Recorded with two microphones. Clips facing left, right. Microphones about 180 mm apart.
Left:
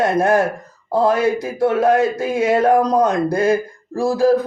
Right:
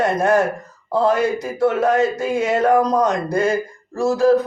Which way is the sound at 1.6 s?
35° left (ahead or behind).